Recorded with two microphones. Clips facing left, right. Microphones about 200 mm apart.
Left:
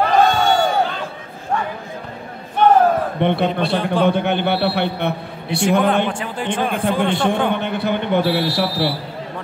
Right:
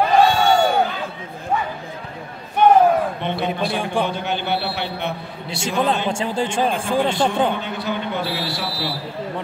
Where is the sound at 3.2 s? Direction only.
60° left (ahead or behind).